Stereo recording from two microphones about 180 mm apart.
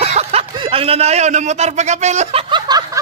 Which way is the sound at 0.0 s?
35° right (ahead or behind).